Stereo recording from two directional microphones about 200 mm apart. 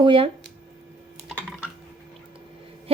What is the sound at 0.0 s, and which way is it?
Speech, 25° right (ahead or behind).